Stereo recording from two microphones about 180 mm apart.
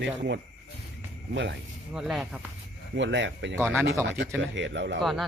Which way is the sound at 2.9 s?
90° right.